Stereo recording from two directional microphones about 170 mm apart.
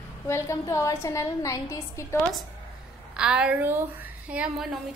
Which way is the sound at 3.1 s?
5° right (ahead or behind).